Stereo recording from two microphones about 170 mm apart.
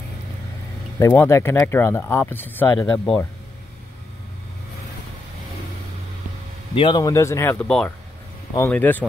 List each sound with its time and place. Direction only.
0.9 s speech: 15° left (ahead or behind)
6.7 s speech: 30° left (ahead or behind)
7.6 s speech: 5° left (ahead or behind)